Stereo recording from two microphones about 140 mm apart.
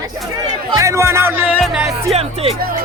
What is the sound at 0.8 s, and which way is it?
Speech, 20° right (ahead or behind).